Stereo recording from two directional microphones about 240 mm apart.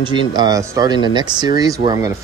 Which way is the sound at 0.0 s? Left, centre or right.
Centre.